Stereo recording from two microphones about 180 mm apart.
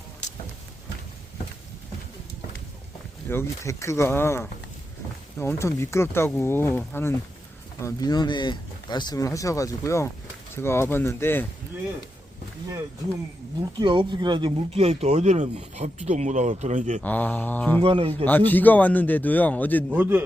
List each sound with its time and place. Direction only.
3.2 s speech: 15° left (ahead or behind)
13.6 s speech: 25° right (ahead or behind); by 17.0 s 40° right (ahead or behind)
17.0 s speech: 10° left (ahead or behind)
17.8 s speech: 30° right (ahead or behind)
18.3 s speech: 10° left (ahead or behind)
19.9 s a man's voice: 10° right (ahead or behind)